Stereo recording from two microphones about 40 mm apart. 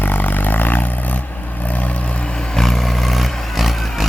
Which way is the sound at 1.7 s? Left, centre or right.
Left.